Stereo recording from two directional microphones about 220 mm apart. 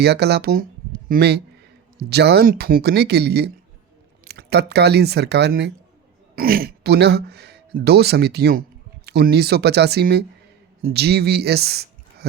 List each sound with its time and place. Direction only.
0.0 s speech: 50° right (ahead or behind)